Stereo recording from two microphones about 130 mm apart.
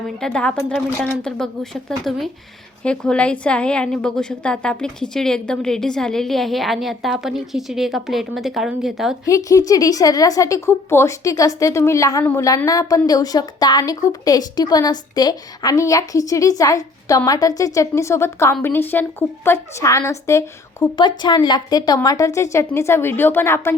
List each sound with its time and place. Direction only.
0.2 s a woman's voice: 5° left (ahead or behind)
9.2 s a woman's voice: 25° left (ahead or behind)
20.9 s a woman's voice: 35° left (ahead or behind); by 23.7 s 15° left (ahead or behind)